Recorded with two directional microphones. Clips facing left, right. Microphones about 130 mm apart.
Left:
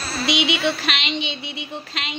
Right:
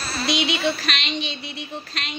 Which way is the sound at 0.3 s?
90° left.